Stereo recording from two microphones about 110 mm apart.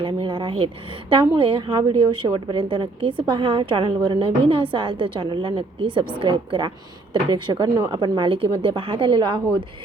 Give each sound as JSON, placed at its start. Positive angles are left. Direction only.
{"t": 0.0, "sound": "a woman's voice", "side_deg": -50}